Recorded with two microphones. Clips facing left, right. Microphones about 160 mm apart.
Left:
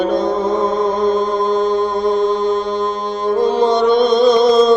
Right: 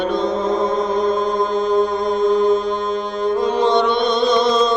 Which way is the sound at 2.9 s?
35° left (ahead or behind).